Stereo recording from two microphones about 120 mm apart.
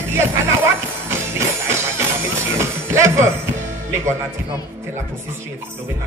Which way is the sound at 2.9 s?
25° right (ahead or behind).